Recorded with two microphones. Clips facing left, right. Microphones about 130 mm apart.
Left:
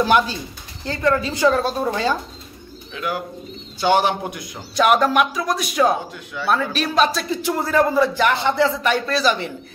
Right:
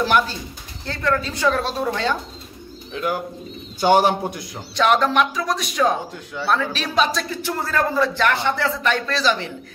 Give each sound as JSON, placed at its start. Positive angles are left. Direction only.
{"t": 0.0, "sound": "speech", "side_deg": 15}
{"t": 2.9, "sound": "speech", "side_deg": -40}
{"t": 4.7, "sound": "a man's voice", "side_deg": 10}
{"t": 7.4, "sound": "speech", "side_deg": 15}